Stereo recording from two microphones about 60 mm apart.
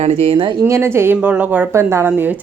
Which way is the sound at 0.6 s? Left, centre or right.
Right.